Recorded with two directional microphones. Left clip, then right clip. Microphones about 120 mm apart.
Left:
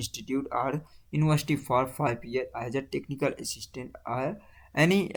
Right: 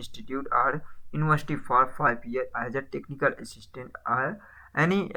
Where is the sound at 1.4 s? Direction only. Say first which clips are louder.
Right 3 dB; 25° left (ahead or behind).